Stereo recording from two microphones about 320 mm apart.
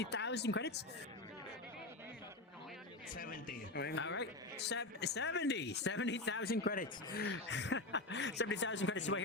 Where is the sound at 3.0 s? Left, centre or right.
Left.